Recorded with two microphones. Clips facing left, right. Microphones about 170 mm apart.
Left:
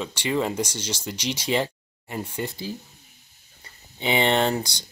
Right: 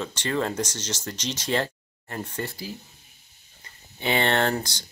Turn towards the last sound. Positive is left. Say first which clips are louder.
# left 2 dB
turn(degrees=15)  # may be behind; listen again after turning